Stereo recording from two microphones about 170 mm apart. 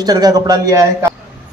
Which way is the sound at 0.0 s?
25° right (ahead or behind).